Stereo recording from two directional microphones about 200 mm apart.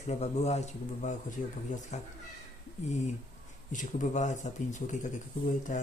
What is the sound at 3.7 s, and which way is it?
Speech, 40° left (ahead or behind).